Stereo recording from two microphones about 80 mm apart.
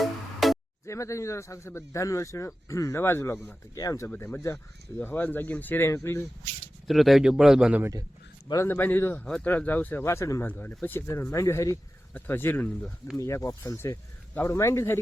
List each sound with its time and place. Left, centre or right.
0.0 s music: centre
0.9 s a man's voice: left
3.8 s speech: left
4.9 s speech: left
5.9 s a man's voice: left
6.8 s a man's voice: centre
8.6 s speech: left
10.0 s a man's voice: left
10.4 s a man's voice: left
12.3 s speech: left
13.1 s a man's voice: left